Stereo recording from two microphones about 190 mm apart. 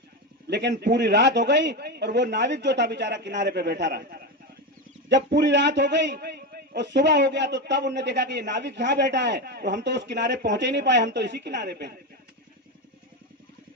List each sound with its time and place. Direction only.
0.4 s a man's voice: 65° right (ahead or behind)
5.0 s a man's voice: 65° right (ahead or behind)